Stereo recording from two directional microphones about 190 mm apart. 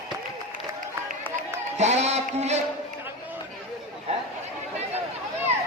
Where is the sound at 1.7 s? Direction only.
35° right (ahead or behind).